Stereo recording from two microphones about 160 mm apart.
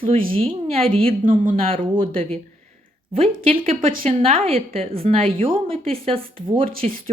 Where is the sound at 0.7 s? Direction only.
35° right (ahead or behind).